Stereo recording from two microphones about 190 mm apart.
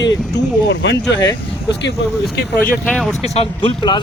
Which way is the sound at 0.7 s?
65° left (ahead or behind).